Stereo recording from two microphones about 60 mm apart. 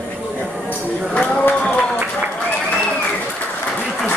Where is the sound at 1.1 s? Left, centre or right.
Centre.